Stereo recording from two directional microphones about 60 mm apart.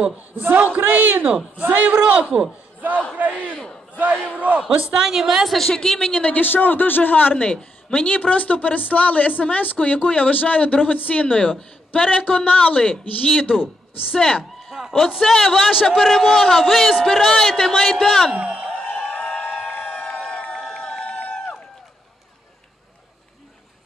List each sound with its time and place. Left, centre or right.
0.0 s a man's voice: right
3.5 s battle cry: centre
4.0 s a man's voice: right
4.6 s a woman's voice: centre
5.6 s a woman's voice: centre
6.2 s a man's voice: left
7.3 s a woman's voice: centre
12.8 s a man's voice: centre
14.7 s speech: centre
15.2 s a man's voice: centre
18.3 s a man's voice: centre
19.0 s a sound: centre
19.9 s a sound: centre
20.5 s run: centre